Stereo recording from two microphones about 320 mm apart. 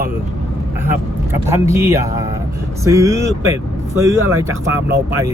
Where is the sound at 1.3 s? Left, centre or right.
Centre.